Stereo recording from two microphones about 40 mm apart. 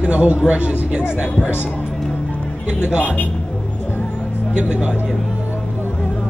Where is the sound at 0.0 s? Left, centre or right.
Right.